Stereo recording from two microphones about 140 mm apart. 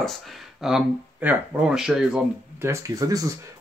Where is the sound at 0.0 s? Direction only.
Centre (ahead or behind).